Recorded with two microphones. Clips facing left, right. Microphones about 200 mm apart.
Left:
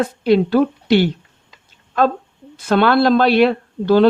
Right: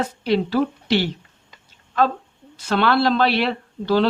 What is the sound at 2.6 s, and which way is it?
Speech, 50° left (ahead or behind).